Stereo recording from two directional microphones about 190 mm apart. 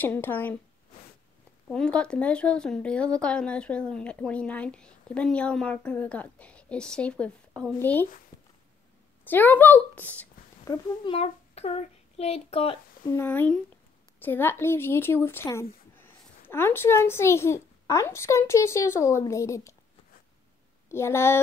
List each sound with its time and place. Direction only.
0.0 s speech: 10° left (ahead or behind)
1.7 s speech: 5° left (ahead or behind)
9.2 s speech: 10° left (ahead or behind)
10.7 s a child's voice: 30° left (ahead or behind)
13.1 s speech: 10° left (ahead or behind)
20.9 s speech: 15° left (ahead or behind)